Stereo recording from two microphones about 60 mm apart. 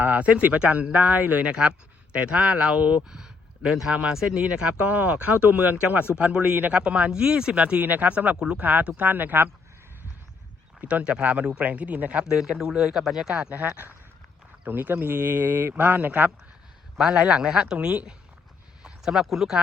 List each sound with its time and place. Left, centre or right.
0.0 s speech: right
10.8 s speech: right
12.2 s speech: centre
13.3 s speech: right
17.1 s speech: centre